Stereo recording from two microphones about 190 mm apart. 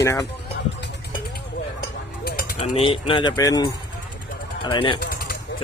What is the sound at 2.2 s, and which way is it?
Mechanisms, 50° left (ahead or behind).